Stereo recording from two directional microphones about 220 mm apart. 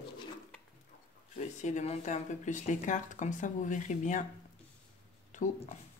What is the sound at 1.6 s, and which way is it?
Speech, 30° left (ahead or behind).